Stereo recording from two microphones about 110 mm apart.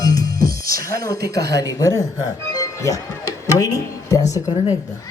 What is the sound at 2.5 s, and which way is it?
Music, 30° left (ahead or behind).